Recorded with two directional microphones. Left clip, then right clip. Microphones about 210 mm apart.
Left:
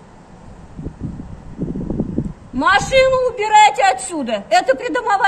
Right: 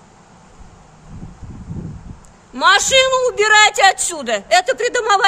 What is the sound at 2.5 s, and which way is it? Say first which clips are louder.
A man's voice: right 1 dB; 55° right (ahead or behind).